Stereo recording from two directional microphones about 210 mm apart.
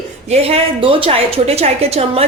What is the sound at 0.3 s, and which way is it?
A woman's voice, 25° right (ahead or behind).